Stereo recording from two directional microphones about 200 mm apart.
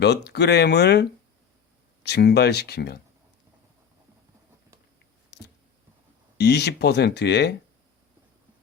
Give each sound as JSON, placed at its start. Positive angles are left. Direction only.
{"t": 0.0, "sound": "speech", "side_deg": 60}
{"t": 2.0, "sound": "speech", "side_deg": 55}
{"t": 5.3, "sound": "a sound", "side_deg": 60}
{"t": 6.3, "sound": "speech", "side_deg": 55}